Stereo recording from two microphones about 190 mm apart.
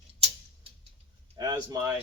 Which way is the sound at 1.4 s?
20° right (ahead or behind).